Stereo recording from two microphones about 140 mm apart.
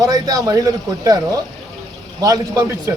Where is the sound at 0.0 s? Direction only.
25° right (ahead or behind).